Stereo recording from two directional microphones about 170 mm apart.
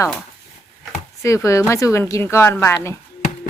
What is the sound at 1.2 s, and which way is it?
Speech, 15° left (ahead or behind).